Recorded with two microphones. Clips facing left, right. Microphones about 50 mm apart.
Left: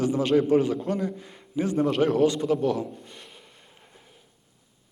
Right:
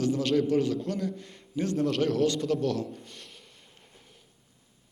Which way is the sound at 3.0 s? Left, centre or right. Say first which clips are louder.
Left 2 dB; centre.